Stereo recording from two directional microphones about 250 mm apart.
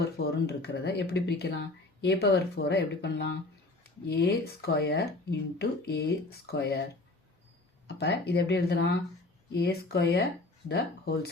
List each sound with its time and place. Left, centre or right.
0.0 s speech: left
7.9 s speech: left